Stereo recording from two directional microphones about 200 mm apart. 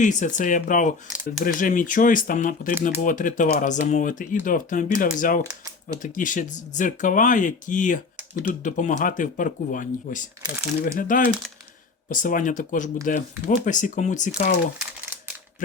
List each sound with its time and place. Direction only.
0.0 s speech: 40° left (ahead or behind)
5.5 s a sound: 15° right (ahead or behind)
6.0 s speech: 40° left (ahead or behind)